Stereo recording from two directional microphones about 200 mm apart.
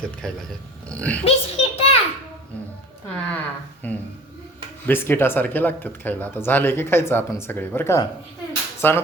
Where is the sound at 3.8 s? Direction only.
10° left (ahead or behind).